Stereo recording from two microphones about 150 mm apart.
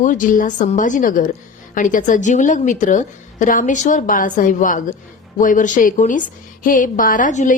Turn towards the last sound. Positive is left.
turn(degrees=60)  # may be behind; listen again after turning